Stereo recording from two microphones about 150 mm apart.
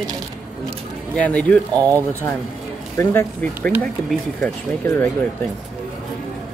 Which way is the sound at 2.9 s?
15° left (ahead or behind).